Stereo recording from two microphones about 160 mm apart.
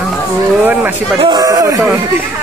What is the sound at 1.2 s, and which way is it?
Speech, 25° right (ahead or behind).